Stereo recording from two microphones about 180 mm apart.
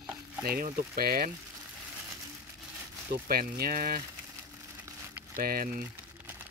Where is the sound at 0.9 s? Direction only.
55° right (ahead or behind).